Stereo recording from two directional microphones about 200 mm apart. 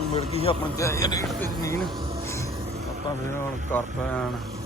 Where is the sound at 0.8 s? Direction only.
15° left (ahead or behind).